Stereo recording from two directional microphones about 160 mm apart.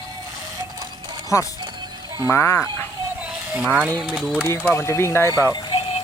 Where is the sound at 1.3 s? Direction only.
20° left (ahead or behind).